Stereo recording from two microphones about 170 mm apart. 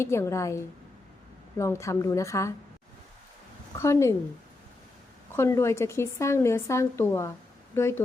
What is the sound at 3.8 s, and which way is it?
Speech, 15° left (ahead or behind).